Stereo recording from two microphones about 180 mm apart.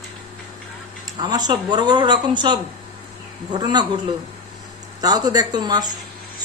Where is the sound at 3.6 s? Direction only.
25° right (ahead or behind).